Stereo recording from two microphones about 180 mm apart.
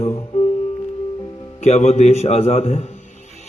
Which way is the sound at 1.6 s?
40° left (ahead or behind).